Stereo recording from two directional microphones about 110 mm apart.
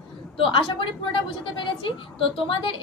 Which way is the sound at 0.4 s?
55° left (ahead or behind).